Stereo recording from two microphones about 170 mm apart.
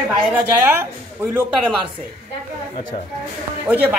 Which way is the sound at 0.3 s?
10° right (ahead or behind).